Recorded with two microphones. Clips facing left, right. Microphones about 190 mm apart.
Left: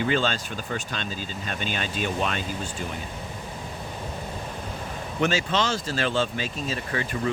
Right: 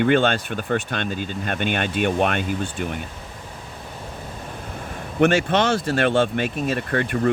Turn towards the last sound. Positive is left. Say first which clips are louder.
# right 6 dB
turn(degrees=-60)  # may be behind; listen again after turning